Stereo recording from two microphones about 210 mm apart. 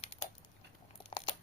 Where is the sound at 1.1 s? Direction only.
25° left (ahead or behind).